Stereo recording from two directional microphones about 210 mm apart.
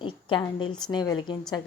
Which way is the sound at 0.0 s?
25° left (ahead or behind).